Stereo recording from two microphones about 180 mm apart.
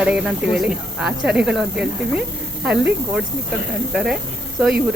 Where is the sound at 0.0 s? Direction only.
5° right (ahead or behind).